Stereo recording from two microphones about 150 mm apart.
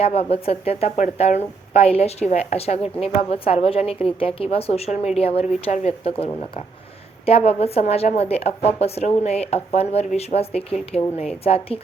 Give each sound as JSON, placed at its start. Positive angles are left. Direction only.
{"t": 0.0, "sound": "a woman's voice", "side_deg": 40}
{"t": 7.3, "sound": "a woman's voice", "side_deg": 40}